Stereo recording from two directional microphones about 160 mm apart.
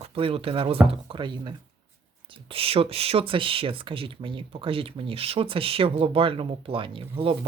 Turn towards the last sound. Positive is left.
turn(degrees=-35)  # may be behind; listen again after turning